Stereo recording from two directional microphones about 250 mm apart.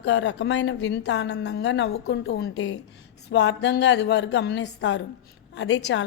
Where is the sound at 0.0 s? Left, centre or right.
Left.